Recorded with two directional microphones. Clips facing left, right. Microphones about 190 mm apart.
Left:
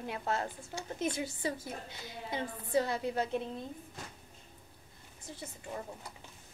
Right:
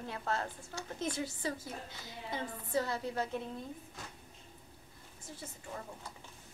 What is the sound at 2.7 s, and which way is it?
Speech, 15° left (ahead or behind).